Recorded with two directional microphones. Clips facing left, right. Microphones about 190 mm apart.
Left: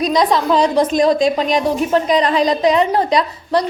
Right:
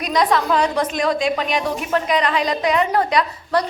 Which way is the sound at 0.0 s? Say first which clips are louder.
Left 3 dB; 35° left (ahead or behind).